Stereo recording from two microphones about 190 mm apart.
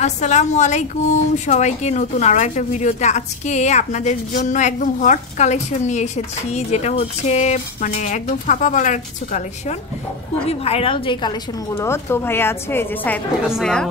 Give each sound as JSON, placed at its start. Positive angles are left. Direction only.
{"t": 0.0, "sound": "speech", "side_deg": 35}
{"t": 10.5, "sound": "a woman's voice", "side_deg": 30}